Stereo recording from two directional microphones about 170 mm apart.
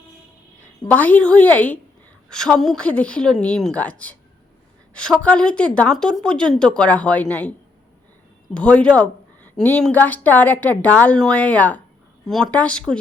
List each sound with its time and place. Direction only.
0.9 s a woman's voice: 10° left (ahead or behind)
8.5 s a woman's voice: 5° left (ahead or behind)